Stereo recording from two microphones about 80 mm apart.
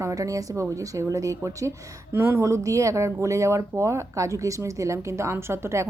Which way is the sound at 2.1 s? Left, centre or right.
Right.